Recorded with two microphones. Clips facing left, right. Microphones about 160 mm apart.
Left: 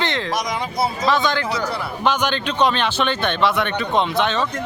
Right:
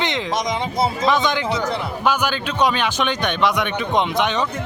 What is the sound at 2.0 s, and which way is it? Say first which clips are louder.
Speech: left 1 dB; 10° right (ahead or behind).